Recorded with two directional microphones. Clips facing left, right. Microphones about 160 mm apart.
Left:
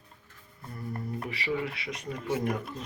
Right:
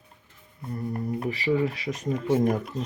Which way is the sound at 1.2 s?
35° right (ahead or behind).